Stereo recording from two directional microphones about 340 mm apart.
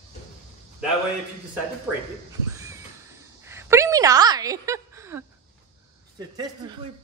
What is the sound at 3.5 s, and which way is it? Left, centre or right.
A woman's voice, centre.